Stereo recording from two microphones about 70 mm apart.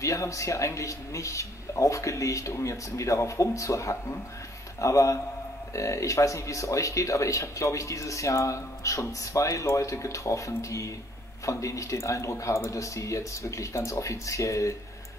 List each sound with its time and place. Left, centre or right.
0.0 s speech: left